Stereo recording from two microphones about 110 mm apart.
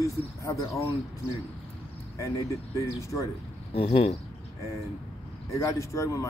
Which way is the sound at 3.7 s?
60° left (ahead or behind).